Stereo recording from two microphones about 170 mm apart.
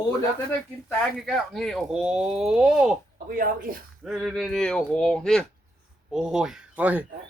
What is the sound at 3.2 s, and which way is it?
Speech, 55° right (ahead or behind).